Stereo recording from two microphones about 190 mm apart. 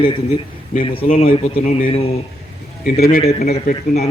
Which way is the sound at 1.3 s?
45° left (ahead or behind).